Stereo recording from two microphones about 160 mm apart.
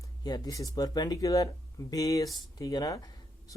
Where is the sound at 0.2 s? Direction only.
25° left (ahead or behind).